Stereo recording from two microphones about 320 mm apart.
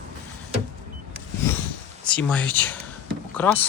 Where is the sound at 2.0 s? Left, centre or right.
Centre.